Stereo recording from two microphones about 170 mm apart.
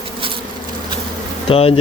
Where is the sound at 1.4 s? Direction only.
35° left (ahead or behind).